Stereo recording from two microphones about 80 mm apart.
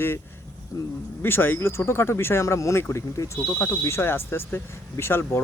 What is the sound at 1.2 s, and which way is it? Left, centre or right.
Speech, left.